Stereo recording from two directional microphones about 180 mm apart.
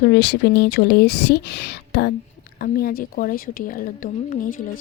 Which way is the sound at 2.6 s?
55° left (ahead or behind).